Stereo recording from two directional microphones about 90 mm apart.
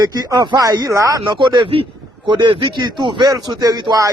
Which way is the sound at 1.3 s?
55° right (ahead or behind).